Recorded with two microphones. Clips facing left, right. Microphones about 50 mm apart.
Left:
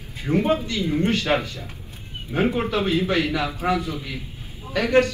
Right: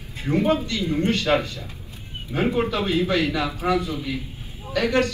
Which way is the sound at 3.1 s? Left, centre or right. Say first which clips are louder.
Even; left.